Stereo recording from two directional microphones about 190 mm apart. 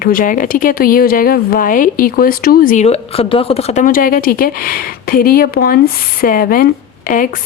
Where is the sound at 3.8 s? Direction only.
45° left (ahead or behind).